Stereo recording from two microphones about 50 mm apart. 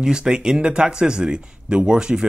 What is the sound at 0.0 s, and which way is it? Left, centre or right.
Speech, centre.